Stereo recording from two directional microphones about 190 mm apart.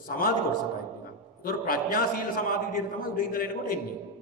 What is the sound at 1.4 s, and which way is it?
A man's voice, 50° left (ahead or behind).